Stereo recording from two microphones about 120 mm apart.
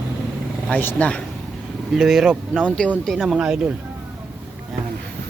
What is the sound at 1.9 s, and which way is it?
Speech, centre (ahead or behind).